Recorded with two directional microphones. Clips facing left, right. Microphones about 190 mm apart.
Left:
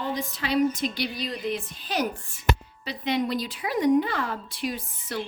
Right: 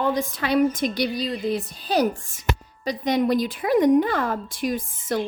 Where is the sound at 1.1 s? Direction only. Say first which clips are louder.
Right 5 dB; 35° right (ahead or behind).